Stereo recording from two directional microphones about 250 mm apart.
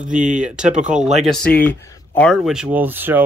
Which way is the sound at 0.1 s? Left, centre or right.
Right.